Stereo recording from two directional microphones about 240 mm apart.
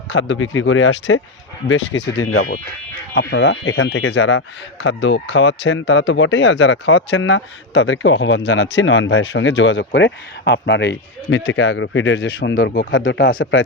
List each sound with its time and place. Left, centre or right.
0.1 s speech: left
4.1 s speech: left
12.5 s speech: left